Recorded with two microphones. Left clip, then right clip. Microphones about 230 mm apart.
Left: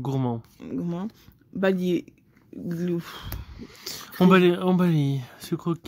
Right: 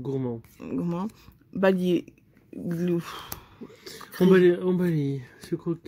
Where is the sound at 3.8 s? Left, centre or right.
Left.